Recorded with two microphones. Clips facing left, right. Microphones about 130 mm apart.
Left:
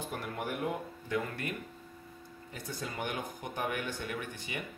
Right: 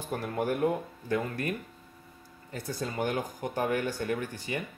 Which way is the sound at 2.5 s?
40° right (ahead or behind).